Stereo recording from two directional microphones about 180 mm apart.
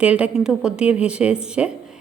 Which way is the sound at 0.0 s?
5° right (ahead or behind).